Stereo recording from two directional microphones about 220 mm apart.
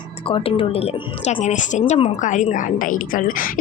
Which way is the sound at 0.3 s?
25° left (ahead or behind).